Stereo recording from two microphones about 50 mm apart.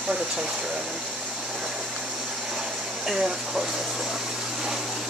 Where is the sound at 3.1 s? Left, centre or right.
Centre.